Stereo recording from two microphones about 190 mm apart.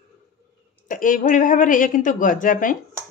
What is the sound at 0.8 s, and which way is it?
A woman's voice, 45° left (ahead or behind).